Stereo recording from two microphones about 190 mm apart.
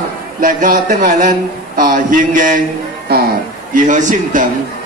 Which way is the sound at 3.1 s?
55° right (ahead or behind).